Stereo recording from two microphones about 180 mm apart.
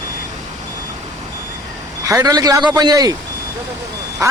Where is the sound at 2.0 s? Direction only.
20° right (ahead or behind).